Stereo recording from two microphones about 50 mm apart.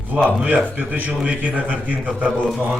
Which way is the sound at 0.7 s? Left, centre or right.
Right.